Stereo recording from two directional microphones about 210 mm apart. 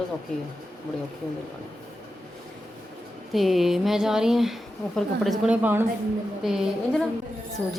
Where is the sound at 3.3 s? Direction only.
Centre (ahead or behind).